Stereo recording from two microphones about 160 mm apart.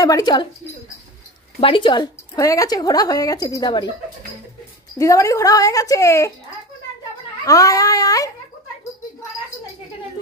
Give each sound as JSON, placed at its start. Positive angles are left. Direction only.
{"t": 0.0, "sound": "a woman's voice", "side_deg": 25}
{"t": 1.6, "sound": "a woman's voice", "side_deg": 30}
{"t": 4.9, "sound": "a woman's voice", "side_deg": 20}
{"t": 7.4, "sound": "a woman's voice", "side_deg": 20}